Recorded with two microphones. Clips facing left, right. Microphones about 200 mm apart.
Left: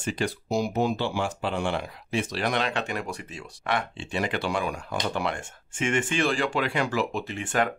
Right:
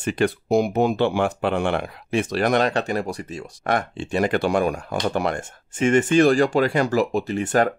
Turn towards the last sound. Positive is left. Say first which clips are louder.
# right 7 dB
turn(degrees=-40)  # may be behind; listen again after turning